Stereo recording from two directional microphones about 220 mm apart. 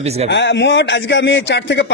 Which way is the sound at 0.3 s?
55° left (ahead or behind).